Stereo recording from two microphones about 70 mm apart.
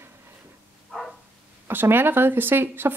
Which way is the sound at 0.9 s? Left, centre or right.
Centre.